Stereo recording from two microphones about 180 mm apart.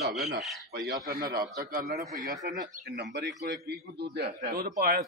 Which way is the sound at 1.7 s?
55° right (ahead or behind).